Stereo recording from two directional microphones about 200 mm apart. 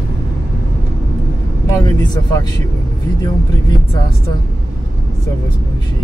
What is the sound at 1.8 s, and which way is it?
Vehicle, 15° left (ahead or behind).